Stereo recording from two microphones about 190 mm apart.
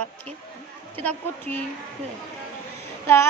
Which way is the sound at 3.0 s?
15° left (ahead or behind).